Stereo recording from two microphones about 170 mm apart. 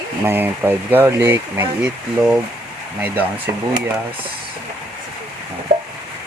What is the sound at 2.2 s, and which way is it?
Speech, centre (ahead or behind).